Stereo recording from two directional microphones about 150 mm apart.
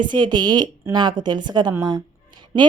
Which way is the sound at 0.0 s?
30° right (ahead or behind).